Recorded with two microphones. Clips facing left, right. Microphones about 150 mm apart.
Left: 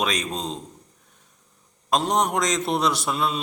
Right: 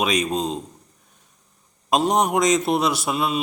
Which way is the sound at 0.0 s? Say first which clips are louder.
Right 5 dB; 10° right (ahead or behind).